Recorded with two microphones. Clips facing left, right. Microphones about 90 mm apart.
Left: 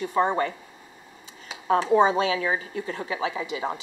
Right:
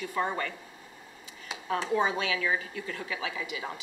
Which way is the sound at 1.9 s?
30° left (ahead or behind).